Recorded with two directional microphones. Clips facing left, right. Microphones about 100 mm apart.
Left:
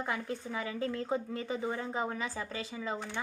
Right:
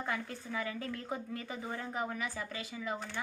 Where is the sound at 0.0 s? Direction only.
20° left (ahead or behind).